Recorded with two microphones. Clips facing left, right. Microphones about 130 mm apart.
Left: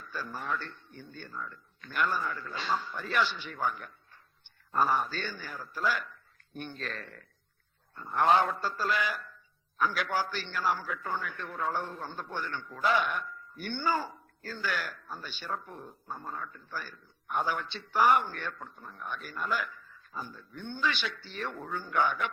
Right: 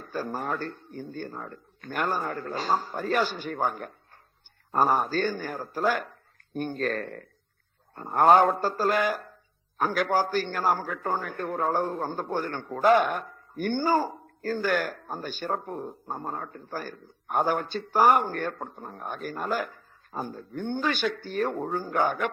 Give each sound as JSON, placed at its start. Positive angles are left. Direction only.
{"t": 0.0, "sound": "a man's voice", "side_deg": -45}